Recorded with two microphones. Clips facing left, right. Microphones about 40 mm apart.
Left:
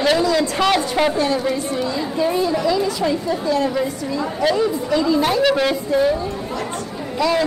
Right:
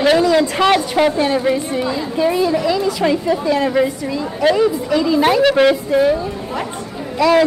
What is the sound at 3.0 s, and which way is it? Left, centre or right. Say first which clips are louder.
Speech: right 4 dB; right.